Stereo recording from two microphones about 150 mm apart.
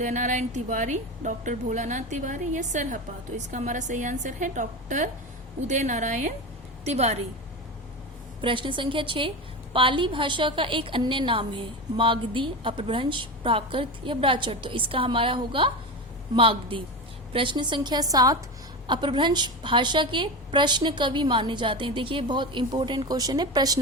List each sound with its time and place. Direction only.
0.0 s a woman's voice: 55° right (ahead or behind)
8.4 s a woman's voice: 35° right (ahead or behind)